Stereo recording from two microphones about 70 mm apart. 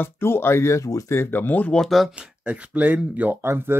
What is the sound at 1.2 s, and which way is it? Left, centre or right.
Speech, left.